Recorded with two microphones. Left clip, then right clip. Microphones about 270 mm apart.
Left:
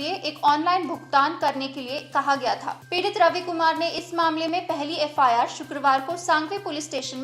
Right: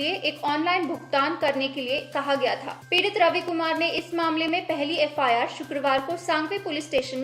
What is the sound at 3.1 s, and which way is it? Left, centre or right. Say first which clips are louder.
A woman's voice: left 1 dB; left.